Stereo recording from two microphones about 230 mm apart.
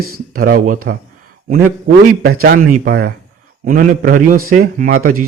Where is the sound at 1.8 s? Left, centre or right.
Right.